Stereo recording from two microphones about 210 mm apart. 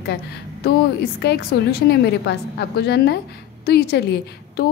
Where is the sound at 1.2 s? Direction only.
50° left (ahead or behind).